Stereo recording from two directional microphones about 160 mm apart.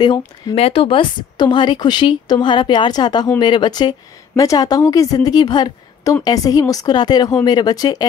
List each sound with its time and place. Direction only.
0.0 s speech: 30° left (ahead or behind)